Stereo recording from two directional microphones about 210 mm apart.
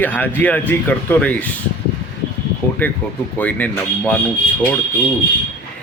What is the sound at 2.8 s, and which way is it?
Speech, 10° left (ahead or behind).